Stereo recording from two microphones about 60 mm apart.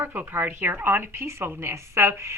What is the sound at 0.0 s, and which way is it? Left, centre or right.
A woman's voice, right.